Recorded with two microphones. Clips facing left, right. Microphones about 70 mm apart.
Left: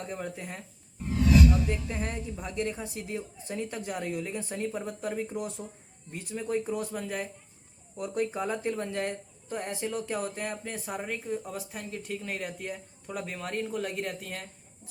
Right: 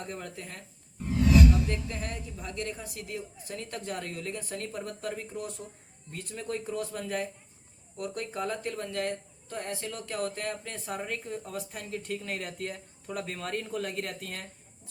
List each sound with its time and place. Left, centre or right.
0.2 s speech: centre
1.2 s whoosh: centre
1.9 s a woman's voice: left; by 7.3 s centre
7.9 s speech: centre